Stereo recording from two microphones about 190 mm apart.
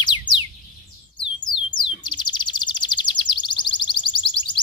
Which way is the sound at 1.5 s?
25° left (ahead or behind).